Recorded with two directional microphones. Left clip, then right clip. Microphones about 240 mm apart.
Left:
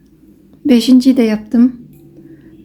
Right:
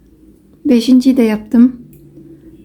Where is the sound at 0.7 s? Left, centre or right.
Centre.